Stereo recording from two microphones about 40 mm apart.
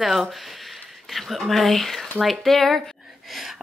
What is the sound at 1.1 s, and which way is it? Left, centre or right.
Speech, centre.